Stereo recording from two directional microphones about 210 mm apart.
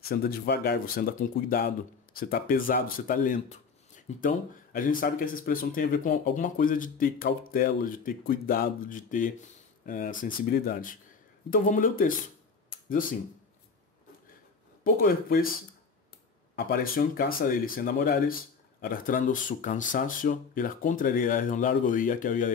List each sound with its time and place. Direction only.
0.1 s speech: 45° left (ahead or behind)
14.8 s speech: 45° left (ahead or behind)
16.5 s speech: 45° left (ahead or behind)